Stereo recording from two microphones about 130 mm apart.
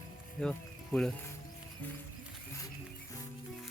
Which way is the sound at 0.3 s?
5° left (ahead or behind).